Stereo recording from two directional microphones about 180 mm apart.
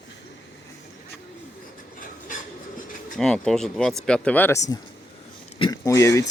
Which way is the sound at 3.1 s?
5° left (ahead or behind).